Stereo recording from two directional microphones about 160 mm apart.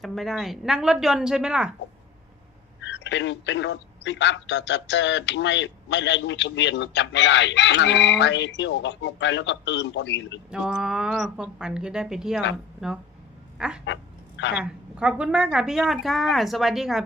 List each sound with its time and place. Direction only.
0.0 s a woman's voice: centre (ahead or behind)
2.9 s a man's voice: 90° left
10.5 s a woman's voice: 5° right (ahead or behind)
13.6 s a sound: 5° right (ahead or behind)
14.5 s a woman's voice: 5° right (ahead or behind)